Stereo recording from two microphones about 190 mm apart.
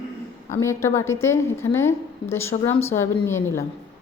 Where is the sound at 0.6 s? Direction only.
15° left (ahead or behind).